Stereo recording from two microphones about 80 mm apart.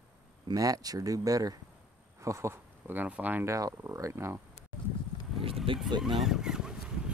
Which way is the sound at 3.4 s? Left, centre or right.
Right.